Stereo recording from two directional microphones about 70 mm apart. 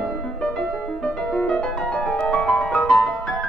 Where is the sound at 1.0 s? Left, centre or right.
Centre.